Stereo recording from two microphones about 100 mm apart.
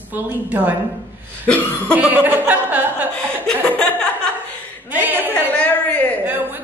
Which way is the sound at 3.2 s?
15° left (ahead or behind).